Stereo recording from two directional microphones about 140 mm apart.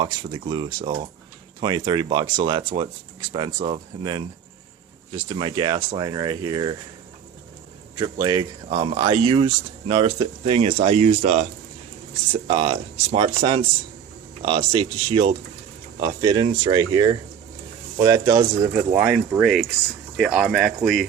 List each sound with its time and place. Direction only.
0.0 s speech: 35° right (ahead or behind)
5.1 s speech: 35° right (ahead or behind)
7.9 s speech: 30° right (ahead or behind); by 11.4 s 55° right (ahead or behind)
12.3 s speech: 45° right (ahead or behind); by 18.7 s 25° right (ahead or behind)
18.9 s speech: 10° right (ahead or behind)